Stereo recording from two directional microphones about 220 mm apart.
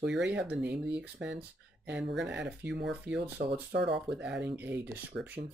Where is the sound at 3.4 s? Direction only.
40° right (ahead or behind).